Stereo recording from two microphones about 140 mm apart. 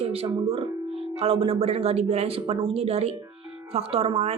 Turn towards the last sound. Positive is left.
turn(degrees=-45)  # may be behind; listen again after turning